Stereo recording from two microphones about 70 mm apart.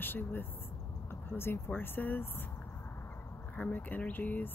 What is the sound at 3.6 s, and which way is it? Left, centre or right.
Speech, left.